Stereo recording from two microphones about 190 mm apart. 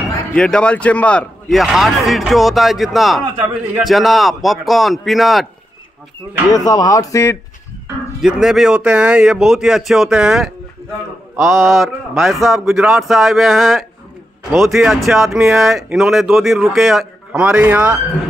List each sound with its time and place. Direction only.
0.3 s speech: 5° left (ahead or behind)
6.5 s speech: 20° left (ahead or behind)
8.2 s speech: 5° right (ahead or behind)
11.3 s mantra: centre (ahead or behind)
11.7 s speech: centre (ahead or behind)